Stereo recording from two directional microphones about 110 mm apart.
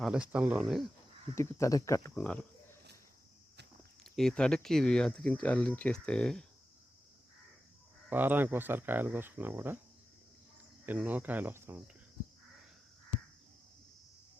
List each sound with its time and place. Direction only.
0.1 s speech: 10° right (ahead or behind)
1.4 s speech: 25° left (ahead or behind)
2.2 s speech: 10° left (ahead or behind)
4.0 s speech: 5° left (ahead or behind)
8.1 s speech: 15° right (ahead or behind)
10.8 s speech: 15° right (ahead or behind)